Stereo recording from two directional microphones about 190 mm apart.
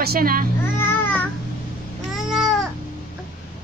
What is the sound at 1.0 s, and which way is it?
Babbling, 10° left (ahead or behind).